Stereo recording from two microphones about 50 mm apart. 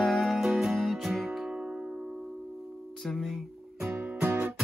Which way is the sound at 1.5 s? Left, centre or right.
Right.